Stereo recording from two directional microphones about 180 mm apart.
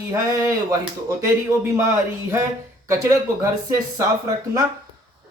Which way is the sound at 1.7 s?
15° right (ahead or behind).